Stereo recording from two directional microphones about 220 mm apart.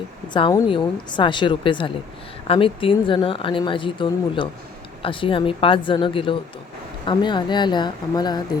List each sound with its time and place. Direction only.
0.3 s a woman's voice: 25° left (ahead or behind)